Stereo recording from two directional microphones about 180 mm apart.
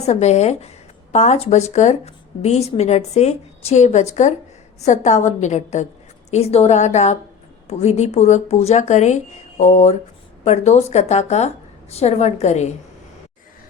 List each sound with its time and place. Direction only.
0.0 s speech: 40° left (ahead or behind)